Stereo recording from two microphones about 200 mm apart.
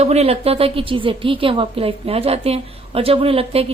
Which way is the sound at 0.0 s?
30° right (ahead or behind).